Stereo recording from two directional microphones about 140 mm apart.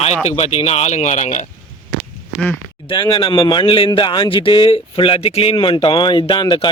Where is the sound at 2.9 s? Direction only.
40° left (ahead or behind).